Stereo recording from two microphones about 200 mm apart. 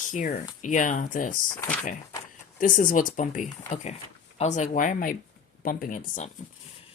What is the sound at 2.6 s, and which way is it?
Speech, 40° left (ahead or behind).